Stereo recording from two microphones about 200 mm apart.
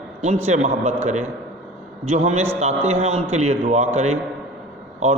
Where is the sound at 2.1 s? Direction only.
35° right (ahead or behind).